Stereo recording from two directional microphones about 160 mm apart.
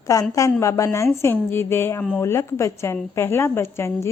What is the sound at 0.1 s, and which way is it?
A woman's voice, 20° left (ahead or behind).